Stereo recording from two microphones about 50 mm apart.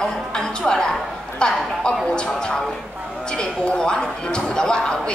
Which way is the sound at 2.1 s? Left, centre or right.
Centre.